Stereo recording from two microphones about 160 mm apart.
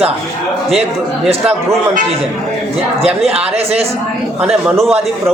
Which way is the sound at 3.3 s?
40° right (ahead or behind).